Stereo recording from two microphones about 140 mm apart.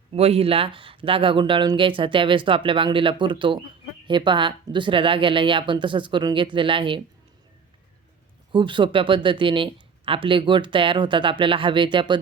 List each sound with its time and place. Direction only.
0.1 s speech: 45° right (ahead or behind)
8.5 s speech: 35° right (ahead or behind)